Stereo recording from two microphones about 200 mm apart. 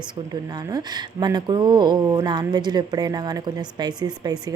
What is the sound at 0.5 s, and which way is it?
Speech, 20° right (ahead or behind).